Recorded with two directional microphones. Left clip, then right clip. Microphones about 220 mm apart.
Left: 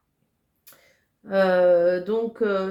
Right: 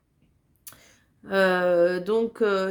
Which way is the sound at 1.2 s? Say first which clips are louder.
Left 3 dB; 40° right (ahead or behind).